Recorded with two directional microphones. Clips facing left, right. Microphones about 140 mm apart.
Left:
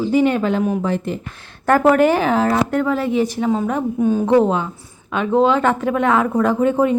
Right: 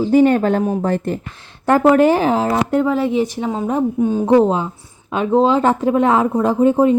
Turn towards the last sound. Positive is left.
turn(degrees=-30)  # may be behind; listen again after turning